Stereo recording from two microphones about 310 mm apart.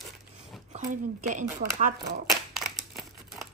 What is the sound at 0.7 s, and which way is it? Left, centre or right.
Speech, right.